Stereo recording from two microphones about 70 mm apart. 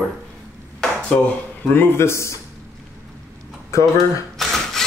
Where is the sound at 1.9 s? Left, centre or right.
Left.